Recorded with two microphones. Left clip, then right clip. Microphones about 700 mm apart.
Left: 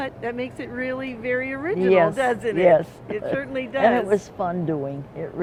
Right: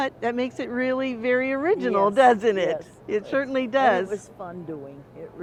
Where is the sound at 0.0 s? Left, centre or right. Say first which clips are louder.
Right 3 dB; right.